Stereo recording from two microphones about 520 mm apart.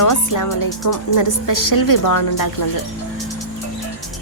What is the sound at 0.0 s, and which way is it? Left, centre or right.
Speech, left.